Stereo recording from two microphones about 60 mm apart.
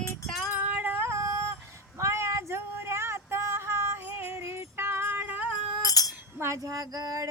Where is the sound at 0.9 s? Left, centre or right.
Right.